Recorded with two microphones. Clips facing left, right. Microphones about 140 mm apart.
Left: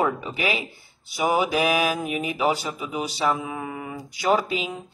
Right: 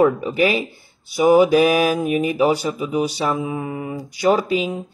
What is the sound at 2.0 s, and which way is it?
Mantra, 40° right (ahead or behind).